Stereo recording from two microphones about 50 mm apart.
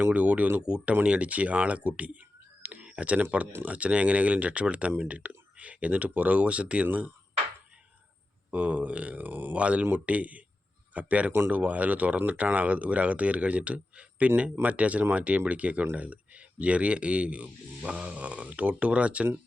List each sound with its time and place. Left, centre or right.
0.0 s speech: right
0.6 s speech: right
2.6 s a sound: right
3.7 s speech: right
6.8 s speech: right
8.4 s speech: right
11.3 s speech: right
11.5 s speech: right